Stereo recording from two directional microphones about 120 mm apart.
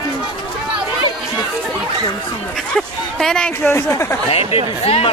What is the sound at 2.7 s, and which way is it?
Speech, 5° left (ahead or behind).